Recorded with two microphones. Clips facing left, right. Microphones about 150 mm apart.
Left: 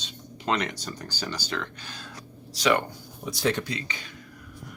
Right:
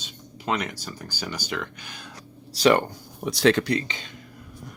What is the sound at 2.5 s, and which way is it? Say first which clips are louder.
Speech: right 5 dB; 35° right (ahead or behind).